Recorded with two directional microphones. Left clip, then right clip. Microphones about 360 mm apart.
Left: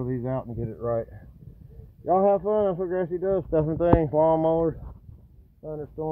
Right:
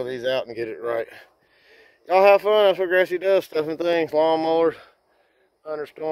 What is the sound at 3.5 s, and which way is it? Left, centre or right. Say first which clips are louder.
Speech: even; right.